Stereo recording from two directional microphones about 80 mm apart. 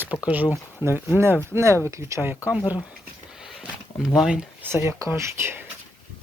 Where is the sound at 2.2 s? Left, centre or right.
Right.